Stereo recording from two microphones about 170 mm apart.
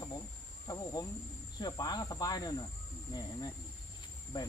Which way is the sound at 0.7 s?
20° left (ahead or behind).